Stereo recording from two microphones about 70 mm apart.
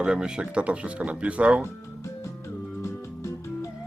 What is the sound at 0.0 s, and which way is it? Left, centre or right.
Speech, centre.